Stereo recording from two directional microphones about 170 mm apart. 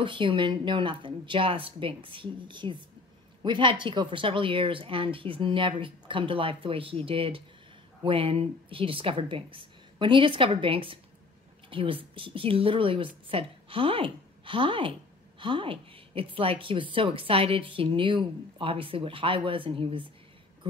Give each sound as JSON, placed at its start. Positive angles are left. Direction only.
{"t": 0.0, "sound": "a woman's voice", "side_deg": -30}